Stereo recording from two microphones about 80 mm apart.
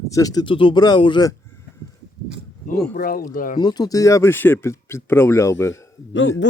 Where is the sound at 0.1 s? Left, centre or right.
Left.